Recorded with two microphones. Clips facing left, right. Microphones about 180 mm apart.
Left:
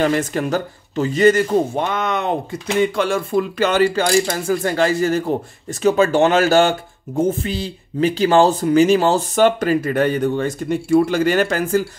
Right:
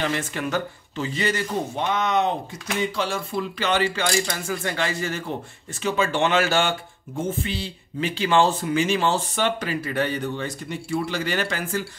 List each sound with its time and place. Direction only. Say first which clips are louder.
0.0 s speech: left 8 dB; 45° left (ahead or behind)